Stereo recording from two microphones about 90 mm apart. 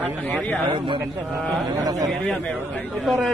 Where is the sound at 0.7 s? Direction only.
65° right (ahead or behind).